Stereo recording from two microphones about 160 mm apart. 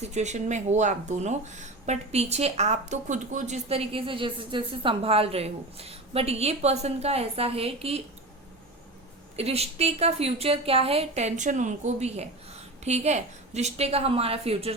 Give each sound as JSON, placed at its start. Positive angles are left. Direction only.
{"t": 0.0, "sound": "speech", "side_deg": -45}
{"t": 9.3, "sound": "speech", "side_deg": -40}